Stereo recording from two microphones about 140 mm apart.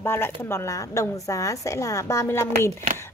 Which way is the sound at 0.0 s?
15° left (ahead or behind).